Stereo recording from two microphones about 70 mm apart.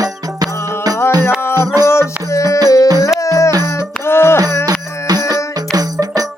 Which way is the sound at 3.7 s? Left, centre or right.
Left.